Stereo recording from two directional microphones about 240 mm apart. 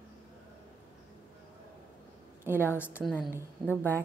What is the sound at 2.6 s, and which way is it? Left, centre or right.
Speech, centre.